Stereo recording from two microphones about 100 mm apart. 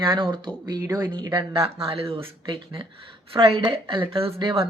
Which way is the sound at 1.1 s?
50° right (ahead or behind).